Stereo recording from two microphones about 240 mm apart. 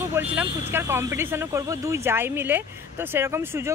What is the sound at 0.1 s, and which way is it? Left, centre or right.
Speech, centre.